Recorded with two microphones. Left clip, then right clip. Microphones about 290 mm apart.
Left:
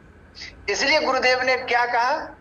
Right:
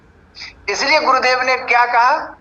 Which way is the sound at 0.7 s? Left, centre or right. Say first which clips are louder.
Right 6 dB; centre.